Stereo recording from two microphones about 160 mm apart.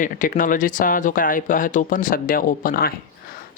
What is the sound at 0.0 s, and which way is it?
Speech, 55° left (ahead or behind).